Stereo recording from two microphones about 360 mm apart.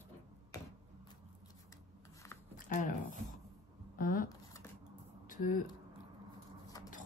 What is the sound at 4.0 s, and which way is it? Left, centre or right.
Speech, left.